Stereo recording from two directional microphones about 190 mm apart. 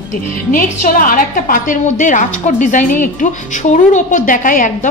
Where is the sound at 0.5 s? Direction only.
45° left (ahead or behind).